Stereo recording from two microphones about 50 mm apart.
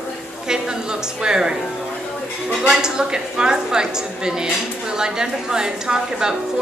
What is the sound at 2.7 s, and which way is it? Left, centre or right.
A woman's voice, centre.